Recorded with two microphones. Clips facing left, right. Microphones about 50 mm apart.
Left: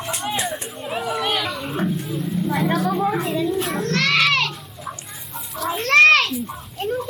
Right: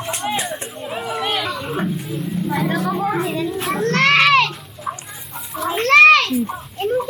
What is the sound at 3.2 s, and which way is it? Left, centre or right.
Children playing, centre.